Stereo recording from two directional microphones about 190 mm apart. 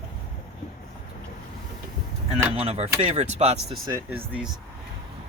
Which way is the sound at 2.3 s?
30° right (ahead or behind).